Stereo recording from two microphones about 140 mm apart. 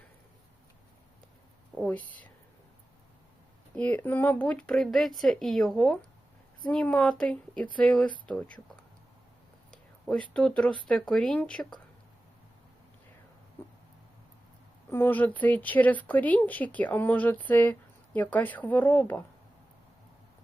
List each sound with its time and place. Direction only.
1.8 s speech: 10° left (ahead or behind)
3.8 s speech: 10° left (ahead or behind)
10.3 s speech: 5° left (ahead or behind)
14.8 s speech: 15° left (ahead or behind)